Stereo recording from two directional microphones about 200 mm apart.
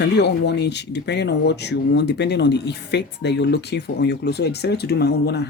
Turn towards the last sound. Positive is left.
turn(degrees=55)  # may be behind; listen again after turning